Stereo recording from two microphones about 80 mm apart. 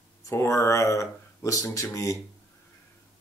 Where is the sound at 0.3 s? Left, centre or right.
Left.